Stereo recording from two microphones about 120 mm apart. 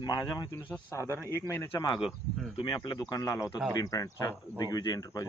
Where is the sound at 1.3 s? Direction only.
20° left (ahead or behind).